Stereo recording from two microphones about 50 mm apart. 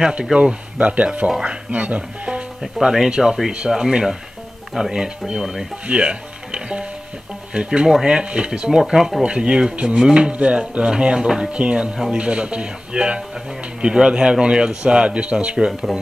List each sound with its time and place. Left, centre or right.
0.1 s speech: right
0.7 s speech: right
2.6 s speech: centre
5.9 s speech: right
9.2 s speech: right
11.5 s speech: right